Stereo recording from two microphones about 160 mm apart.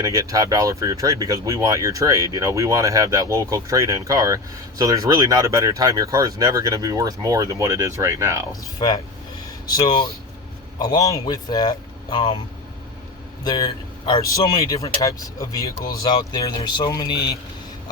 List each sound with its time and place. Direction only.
0.0 s speech: 20° right (ahead or behind)
8.8 s a man's voice: 30° left (ahead or behind)
13.4 s a man's voice: 25° left (ahead or behind)